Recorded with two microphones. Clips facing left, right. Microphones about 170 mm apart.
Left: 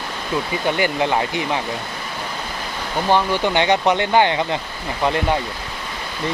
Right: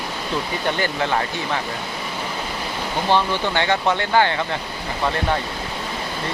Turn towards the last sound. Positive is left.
turn(degrees=20)  # may be behind; listen again after turning